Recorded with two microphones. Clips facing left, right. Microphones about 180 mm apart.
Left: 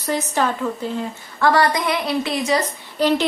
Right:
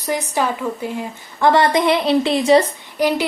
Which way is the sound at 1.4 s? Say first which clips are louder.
Right 3 dB; 25° right (ahead or behind).